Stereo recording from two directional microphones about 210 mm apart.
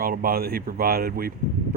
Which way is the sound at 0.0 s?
45° right (ahead or behind).